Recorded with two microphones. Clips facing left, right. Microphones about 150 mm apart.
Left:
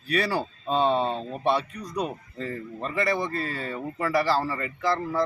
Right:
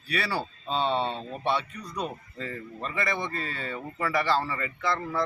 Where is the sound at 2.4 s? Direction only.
35° left (ahead or behind).